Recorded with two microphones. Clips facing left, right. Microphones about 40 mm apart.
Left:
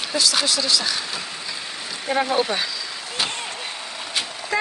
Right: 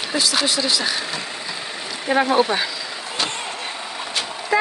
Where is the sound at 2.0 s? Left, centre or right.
Centre.